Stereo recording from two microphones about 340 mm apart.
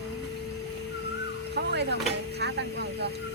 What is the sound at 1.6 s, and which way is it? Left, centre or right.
Speech, right.